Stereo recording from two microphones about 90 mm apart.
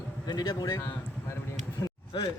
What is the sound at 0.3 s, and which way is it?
Speech, 45° left (ahead or behind).